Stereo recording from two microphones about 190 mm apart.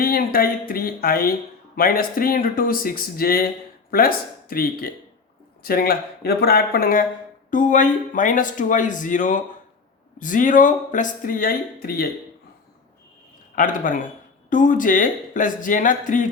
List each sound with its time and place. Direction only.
0.0 s a sound: 50° left (ahead or behind)
0.7 s speech: 50° left (ahead or behind)
13.6 s speech: 45° left (ahead or behind)